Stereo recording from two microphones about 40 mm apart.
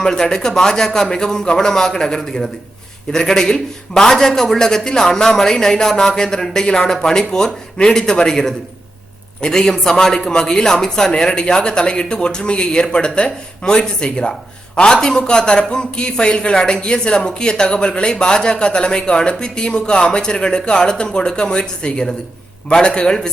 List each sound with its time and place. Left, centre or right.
0.0 s a man's voice: centre